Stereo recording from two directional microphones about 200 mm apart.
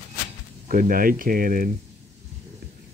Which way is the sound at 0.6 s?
45° right (ahead or behind).